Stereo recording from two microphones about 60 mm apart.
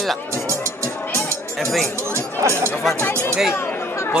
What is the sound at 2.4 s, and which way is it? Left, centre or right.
Speech, right.